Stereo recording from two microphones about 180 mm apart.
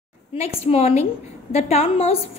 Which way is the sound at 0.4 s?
35° left (ahead or behind).